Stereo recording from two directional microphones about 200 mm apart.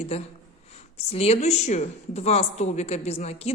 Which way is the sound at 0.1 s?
30° left (ahead or behind).